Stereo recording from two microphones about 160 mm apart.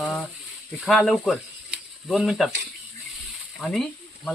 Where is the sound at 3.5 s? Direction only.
Centre (ahead or behind).